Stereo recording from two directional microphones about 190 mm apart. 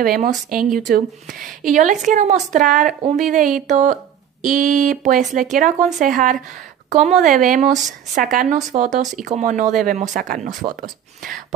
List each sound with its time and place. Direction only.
0.0 s speech: 45° right (ahead or behind)